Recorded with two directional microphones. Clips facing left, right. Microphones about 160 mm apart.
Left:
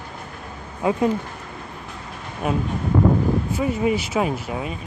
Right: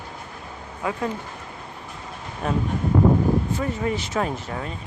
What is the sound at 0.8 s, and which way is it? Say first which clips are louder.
Speech: left 6 dB; 20° left (ahead or behind).